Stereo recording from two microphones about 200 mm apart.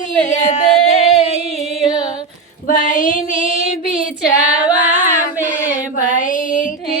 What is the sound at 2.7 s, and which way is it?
Female singing, 40° left (ahead or behind).